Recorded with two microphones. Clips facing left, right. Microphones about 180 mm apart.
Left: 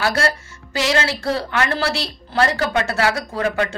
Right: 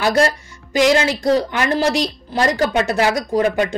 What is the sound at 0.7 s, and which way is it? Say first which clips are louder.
Speech: right 6 dB; 15° right (ahead or behind).